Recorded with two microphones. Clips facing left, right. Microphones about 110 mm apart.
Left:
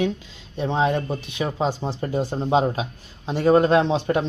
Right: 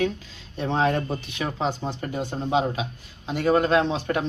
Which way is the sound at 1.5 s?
15° left (ahead or behind).